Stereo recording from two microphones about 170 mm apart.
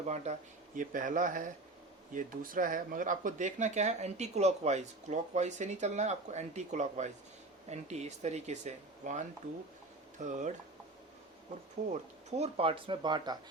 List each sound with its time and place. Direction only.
0.0 s speech: 40° right (ahead or behind)
10.2 s speech: 45° right (ahead or behind)
11.9 s speech: 40° right (ahead or behind)